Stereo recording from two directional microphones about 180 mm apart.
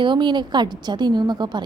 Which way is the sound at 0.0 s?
25° right (ahead or behind).